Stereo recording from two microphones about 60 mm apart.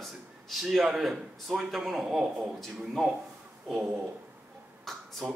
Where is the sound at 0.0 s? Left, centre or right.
Centre.